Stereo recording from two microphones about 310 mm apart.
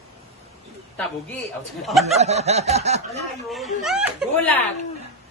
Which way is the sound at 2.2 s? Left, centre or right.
Right.